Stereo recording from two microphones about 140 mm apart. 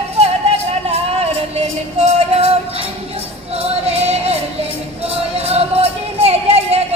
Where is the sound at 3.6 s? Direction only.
45° right (ahead or behind).